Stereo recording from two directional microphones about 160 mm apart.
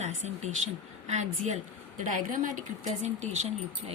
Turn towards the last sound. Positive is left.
turn(degrees=-45)  # may be behind; listen again after turning